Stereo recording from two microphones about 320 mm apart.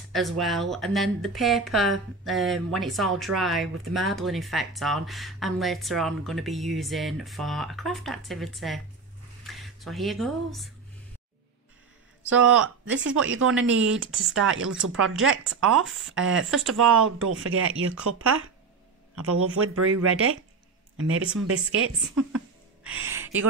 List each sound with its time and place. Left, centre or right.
0.1 s speech: centre
12.3 s speech: right
15.7 s speech: centre
16.2 s speech: right
21.4 s speech: right
22.8 s gasp: centre